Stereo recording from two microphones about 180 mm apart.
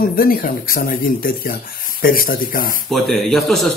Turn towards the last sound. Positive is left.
turn(degrees=0)  # may be behind; listen again after turning